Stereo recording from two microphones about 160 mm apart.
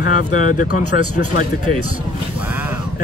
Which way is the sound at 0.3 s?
55° left (ahead or behind).